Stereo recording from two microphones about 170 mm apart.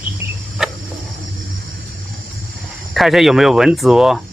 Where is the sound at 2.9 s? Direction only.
Centre (ahead or behind).